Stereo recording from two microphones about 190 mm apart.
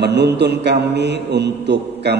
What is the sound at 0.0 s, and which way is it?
A man's voice, 65° right (ahead or behind).